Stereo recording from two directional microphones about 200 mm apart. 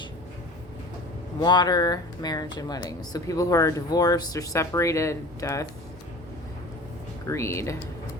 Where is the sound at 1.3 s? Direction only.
20° left (ahead or behind).